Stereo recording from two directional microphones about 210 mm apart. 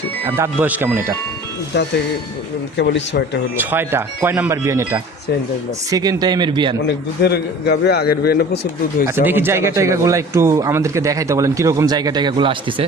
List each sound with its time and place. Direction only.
0.3 s speech: 10° right (ahead or behind)
2.7 s a man's voice: 55° left (ahead or behind)
3.6 s speech: 10° right (ahead or behind)
6.8 s a man's voice: 50° left (ahead or behind)
9.0 s speech: 10° right (ahead or behind)